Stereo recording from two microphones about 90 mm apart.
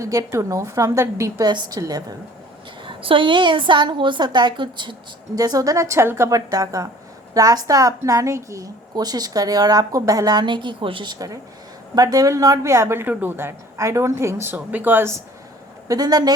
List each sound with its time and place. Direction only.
0.0 s a woman's voice: 40° right (ahead or behind)
1.5 s a woman's voice: 50° right (ahead or behind)
2.8 s a woman's voice: 70° right (ahead or behind); by 14.5 s 30° right (ahead or behind)
14.5 s speech: 20° right (ahead or behind)
15.9 s a woman's voice: 45° right (ahead or behind)